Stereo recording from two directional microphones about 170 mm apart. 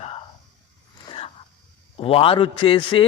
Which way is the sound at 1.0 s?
35° left (ahead or behind).